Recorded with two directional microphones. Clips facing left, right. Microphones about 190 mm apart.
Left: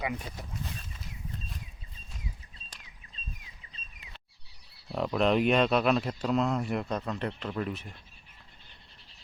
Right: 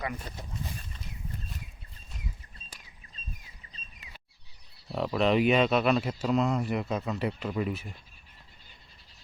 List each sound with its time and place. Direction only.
0.2 s speech: centre (ahead or behind)
4.9 s speech: centre (ahead or behind)